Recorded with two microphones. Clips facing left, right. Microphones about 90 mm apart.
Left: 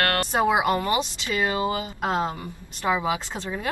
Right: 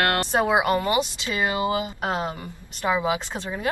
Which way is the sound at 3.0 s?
20° right (ahead or behind).